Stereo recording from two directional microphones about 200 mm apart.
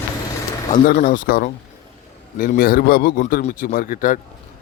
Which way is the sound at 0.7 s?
40° left (ahead or behind).